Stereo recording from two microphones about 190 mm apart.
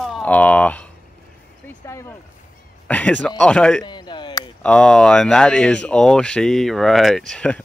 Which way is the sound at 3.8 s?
25° left (ahead or behind).